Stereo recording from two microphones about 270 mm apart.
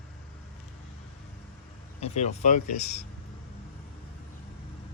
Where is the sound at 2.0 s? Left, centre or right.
Left.